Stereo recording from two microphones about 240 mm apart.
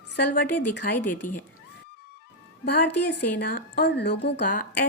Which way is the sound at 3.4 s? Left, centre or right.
Left.